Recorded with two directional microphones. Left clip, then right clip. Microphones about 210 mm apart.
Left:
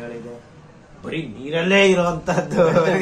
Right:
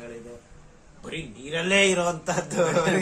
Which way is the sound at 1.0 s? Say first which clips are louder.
Left 7 dB; 10° right (ahead or behind).